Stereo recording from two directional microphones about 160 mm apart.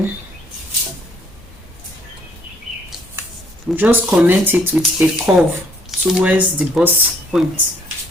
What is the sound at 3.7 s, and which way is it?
Speech, 10° right (ahead or behind).